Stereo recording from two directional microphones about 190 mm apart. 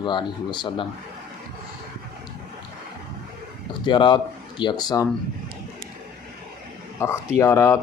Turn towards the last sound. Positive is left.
turn(degrees=15)  # may be behind; listen again after turning